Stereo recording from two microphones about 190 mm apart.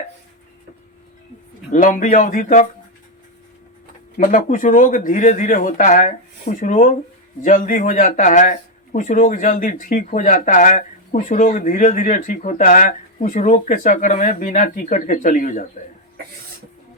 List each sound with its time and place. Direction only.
1.7 s speech: 45° left (ahead or behind)
4.2 s speech: 45° left (ahead or behind)